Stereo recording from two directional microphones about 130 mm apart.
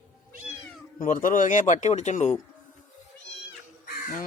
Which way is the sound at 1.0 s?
85° left.